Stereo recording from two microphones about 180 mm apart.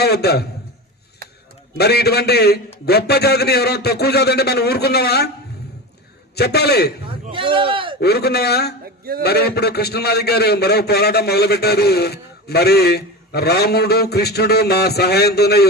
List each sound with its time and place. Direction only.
0.0 s a man's voice: 60° left (ahead or behind)
1.8 s a man's voice: 65° left (ahead or behind)
6.3 s a man's voice: 65° left (ahead or behind)
7.3 s speech: 30° right (ahead or behind)
8.0 s a man's voice: 65° left (ahead or behind)